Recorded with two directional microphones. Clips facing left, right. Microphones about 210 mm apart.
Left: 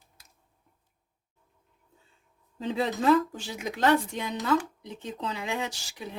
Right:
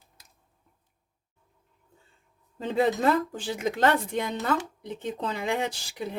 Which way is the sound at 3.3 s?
50° right (ahead or behind).